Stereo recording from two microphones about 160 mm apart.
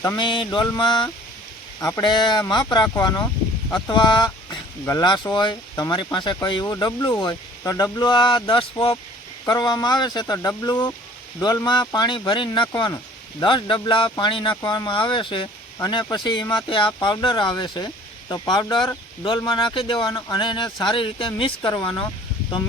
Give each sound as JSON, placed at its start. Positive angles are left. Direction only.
{"t": 0.2, "sound": "speech", "side_deg": 30}